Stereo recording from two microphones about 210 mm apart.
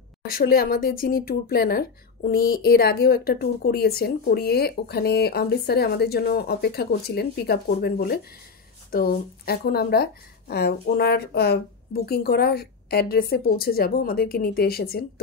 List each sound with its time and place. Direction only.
0.3 s speech: 45° left (ahead or behind)